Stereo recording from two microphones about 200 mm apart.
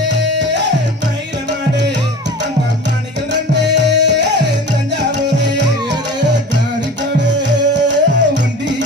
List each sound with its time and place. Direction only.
0.1 s music: 60° right (ahead or behind)
3.3 s music: 60° right (ahead or behind)
7.2 s music: 60° right (ahead or behind)